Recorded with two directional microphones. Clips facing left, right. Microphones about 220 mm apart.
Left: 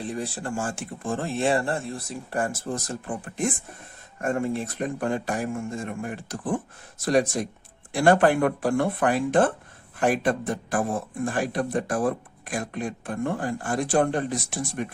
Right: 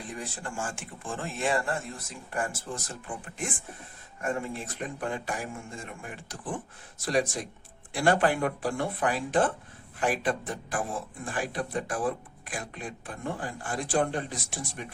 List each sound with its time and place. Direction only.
0.0 s a man's voice: 35° left (ahead or behind); by 14.9 s 50° left (ahead or behind)